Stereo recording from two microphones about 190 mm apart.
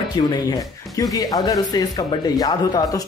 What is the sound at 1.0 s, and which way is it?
A man's voice, 20° left (ahead or behind).